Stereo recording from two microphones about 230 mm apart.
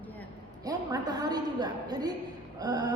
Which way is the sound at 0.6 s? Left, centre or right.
Centre.